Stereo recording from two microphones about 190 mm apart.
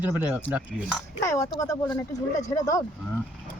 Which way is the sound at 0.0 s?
10° right (ahead or behind).